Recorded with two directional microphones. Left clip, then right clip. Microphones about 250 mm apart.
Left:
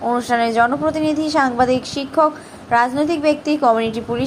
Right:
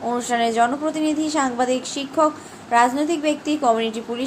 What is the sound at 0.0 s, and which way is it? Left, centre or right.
A woman's voice, centre.